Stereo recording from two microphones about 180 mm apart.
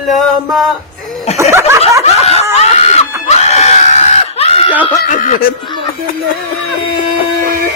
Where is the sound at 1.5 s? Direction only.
15° right (ahead or behind).